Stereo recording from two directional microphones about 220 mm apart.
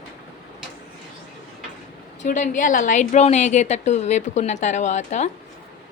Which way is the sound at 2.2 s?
35° left (ahead or behind).